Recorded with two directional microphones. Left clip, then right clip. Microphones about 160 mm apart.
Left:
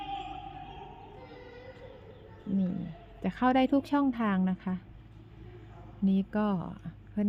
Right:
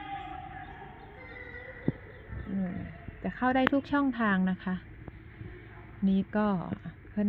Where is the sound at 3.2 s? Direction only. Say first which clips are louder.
Left 1 dB; 30° left (ahead or behind); by 4.8 s 15° left (ahead or behind).